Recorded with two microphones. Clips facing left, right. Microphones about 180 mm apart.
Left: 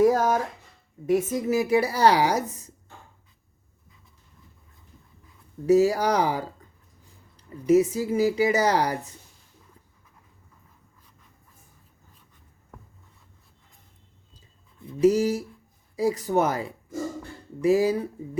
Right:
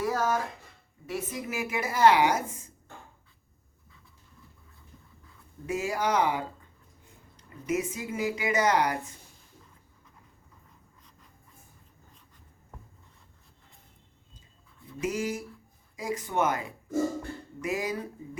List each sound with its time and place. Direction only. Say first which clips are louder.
0.0 s a woman's voice: left 8 dB; 45° left (ahead or behind)
5.6 s a woman's voice: left 10 dB; 35° left (ahead or behind)
15.0 s a woman's voice: left 11 dB; 35° left (ahead or behind)